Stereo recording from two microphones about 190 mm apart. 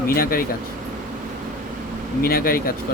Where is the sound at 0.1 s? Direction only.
50° left (ahead or behind).